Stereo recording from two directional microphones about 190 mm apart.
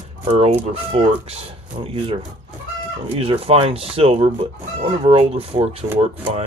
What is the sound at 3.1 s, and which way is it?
Speech, 30° right (ahead or behind).